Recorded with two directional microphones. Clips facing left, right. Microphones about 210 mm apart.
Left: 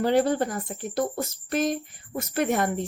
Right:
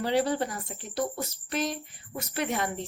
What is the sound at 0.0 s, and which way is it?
Speech, 50° left (ahead or behind).